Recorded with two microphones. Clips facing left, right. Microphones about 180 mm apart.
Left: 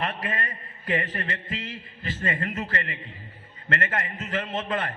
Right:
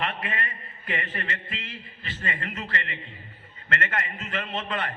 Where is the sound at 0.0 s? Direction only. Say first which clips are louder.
Left 1 dB; 40° left (ahead or behind).